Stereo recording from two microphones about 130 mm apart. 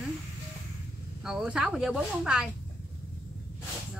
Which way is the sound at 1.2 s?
5° right (ahead or behind).